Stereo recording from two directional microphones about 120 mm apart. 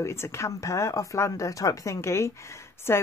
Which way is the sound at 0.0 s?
25° left (ahead or behind).